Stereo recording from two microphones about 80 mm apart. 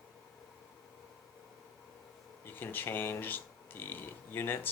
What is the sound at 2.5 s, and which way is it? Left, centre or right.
Speech, left.